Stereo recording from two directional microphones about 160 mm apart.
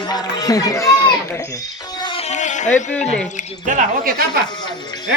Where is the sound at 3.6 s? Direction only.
60° right (ahead or behind).